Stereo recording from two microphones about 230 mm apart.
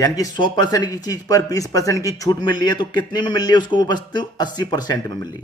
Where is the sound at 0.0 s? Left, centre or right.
Centre.